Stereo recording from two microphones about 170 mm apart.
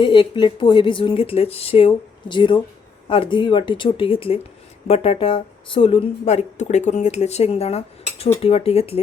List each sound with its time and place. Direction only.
0.0 s speech: 30° left (ahead or behind)